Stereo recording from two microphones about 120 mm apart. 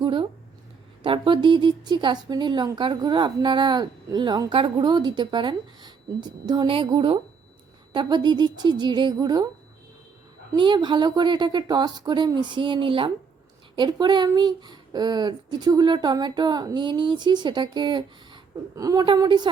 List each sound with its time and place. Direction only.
0.0 s a sound: 45° right (ahead or behind)
1.0 s speech: 45° right (ahead or behind)
10.6 s speech: 40° right (ahead or behind)
18.8 s a woman's voice: 30° right (ahead or behind)